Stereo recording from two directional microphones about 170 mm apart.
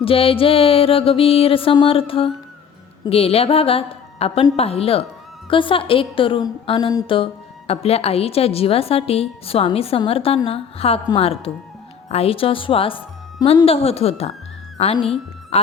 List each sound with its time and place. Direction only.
0.0 s music: 35° left (ahead or behind)
14.9 s speech: 35° left (ahead or behind)